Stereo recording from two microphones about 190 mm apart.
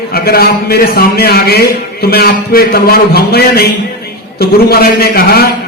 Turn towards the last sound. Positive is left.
turn(degrees=55)  # may be behind; listen again after turning